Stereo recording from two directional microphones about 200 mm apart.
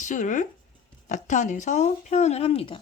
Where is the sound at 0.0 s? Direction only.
40° left (ahead or behind).